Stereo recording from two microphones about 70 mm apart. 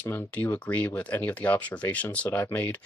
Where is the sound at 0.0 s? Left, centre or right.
Left.